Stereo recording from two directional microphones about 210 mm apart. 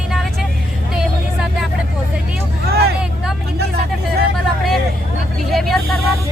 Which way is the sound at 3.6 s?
50° right (ahead or behind).